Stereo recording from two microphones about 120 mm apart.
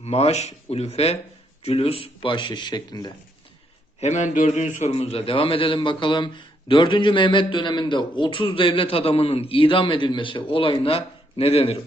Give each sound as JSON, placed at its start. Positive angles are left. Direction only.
{"t": 0.0, "sound": "speech", "side_deg": 60}
{"t": 4.0, "sound": "a man's voice", "side_deg": 80}